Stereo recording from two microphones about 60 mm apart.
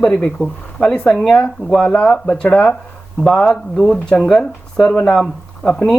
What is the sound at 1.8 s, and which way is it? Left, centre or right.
Speech, centre.